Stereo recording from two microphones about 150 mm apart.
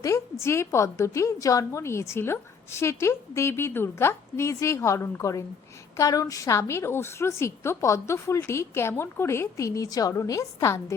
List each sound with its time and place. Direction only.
0.0 s a woman's voice: 20° left (ahead or behind)